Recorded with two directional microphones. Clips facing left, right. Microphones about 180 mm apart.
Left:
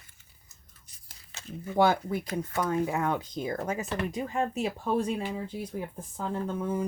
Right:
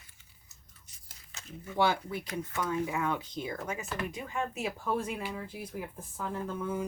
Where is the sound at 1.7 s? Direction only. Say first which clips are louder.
Left 5 dB; 45° left (ahead or behind).